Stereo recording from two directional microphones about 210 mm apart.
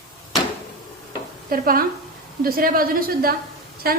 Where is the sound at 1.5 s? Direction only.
45° right (ahead or behind).